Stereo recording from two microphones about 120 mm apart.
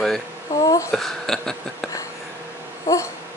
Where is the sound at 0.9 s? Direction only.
5° left (ahead or behind).